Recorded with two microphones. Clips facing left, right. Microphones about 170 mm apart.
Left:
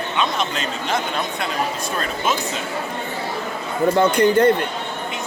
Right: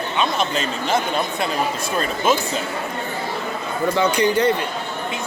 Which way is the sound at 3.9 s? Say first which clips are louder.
Left 3 dB; 55° left (ahead or behind).